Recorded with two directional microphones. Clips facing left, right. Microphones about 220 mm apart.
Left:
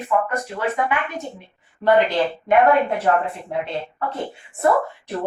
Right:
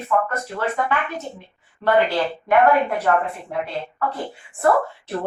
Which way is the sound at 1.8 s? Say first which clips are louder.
Left 3 dB; 15° left (ahead or behind).